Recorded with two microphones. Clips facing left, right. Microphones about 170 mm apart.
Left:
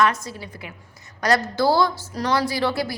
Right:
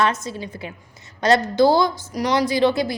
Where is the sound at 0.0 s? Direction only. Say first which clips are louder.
Even; 25° right (ahead or behind).